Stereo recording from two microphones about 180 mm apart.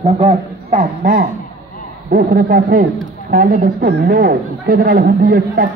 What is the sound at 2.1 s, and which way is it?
A man's voice, 55° right (ahead or behind).